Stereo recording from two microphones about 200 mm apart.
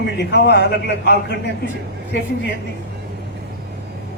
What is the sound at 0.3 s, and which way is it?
A man's voice, 55° left (ahead or behind).